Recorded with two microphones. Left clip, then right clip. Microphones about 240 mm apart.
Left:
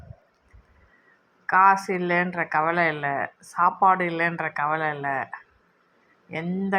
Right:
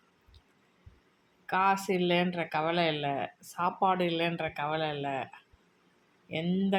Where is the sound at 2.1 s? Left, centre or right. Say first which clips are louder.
Left 7 dB; centre.